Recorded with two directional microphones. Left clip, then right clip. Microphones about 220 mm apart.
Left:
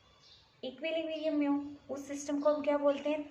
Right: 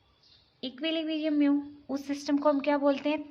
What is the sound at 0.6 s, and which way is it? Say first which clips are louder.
A woman's voice: right 4 dB; 45° right (ahead or behind).